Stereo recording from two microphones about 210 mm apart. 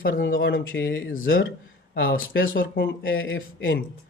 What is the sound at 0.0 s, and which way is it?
Speech, 65° left (ahead or behind).